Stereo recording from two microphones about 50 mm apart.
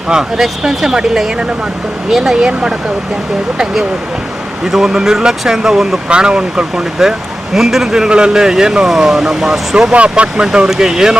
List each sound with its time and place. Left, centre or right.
0.1 s speech: centre
4.6 s speech: centre
7.5 s speech: centre
9.9 s speech: right